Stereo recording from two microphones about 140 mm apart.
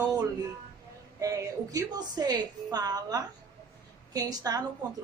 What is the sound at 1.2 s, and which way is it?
A woman's voice, 25° right (ahead or behind).